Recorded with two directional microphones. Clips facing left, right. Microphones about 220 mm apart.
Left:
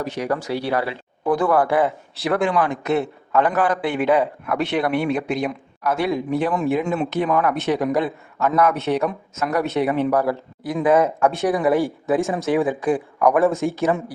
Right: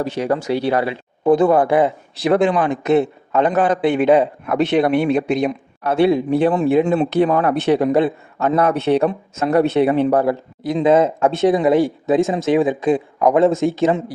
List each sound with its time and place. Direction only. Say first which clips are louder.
0.0 s speech: right 4 dB; 30° right (ahead or behind)